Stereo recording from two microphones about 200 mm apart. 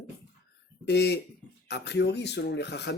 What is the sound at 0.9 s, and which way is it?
A man's voice, 55° left (ahead or behind).